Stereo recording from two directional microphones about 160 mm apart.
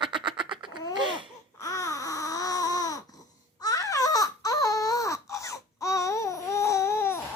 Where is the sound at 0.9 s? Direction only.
30° right (ahead or behind).